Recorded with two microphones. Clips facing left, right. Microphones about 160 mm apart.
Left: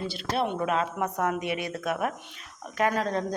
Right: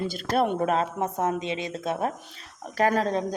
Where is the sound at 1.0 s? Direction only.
25° right (ahead or behind).